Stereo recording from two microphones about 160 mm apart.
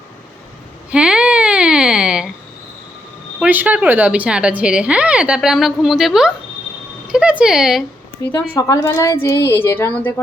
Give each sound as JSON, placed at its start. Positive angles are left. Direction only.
{"t": 0.9, "sound": "a sound", "side_deg": -5}
{"t": 3.4, "sound": "a woman's voice", "side_deg": -10}
{"t": 8.5, "sound": "a woman's voice", "side_deg": 20}